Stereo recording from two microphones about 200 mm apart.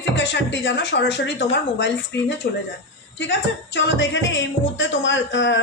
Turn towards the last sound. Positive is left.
turn(degrees=65)  # may be behind; listen again after turning